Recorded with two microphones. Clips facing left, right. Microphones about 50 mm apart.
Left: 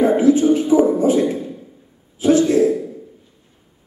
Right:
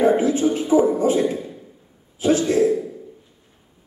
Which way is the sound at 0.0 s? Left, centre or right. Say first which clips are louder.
Left 4 dB; right.